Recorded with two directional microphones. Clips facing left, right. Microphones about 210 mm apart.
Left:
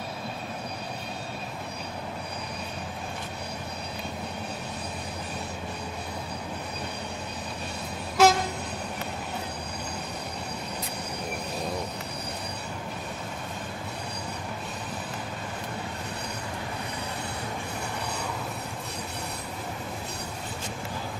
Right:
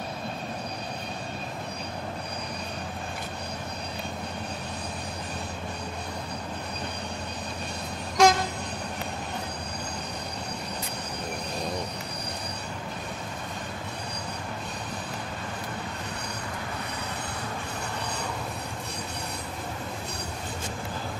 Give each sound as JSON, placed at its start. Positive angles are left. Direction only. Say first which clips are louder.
{"t": 8.2, "sound": "vehicle", "louder": "even", "side_deg": 5}